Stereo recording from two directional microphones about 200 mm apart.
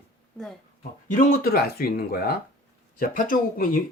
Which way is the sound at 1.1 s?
45° left (ahead or behind).